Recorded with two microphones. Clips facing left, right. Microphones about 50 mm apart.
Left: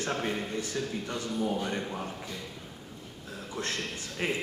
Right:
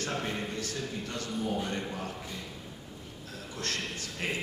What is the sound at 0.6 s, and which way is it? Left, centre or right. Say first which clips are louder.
A man's voice: left 3 dB; centre.